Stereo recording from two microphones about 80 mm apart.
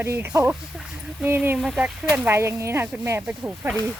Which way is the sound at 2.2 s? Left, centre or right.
Right.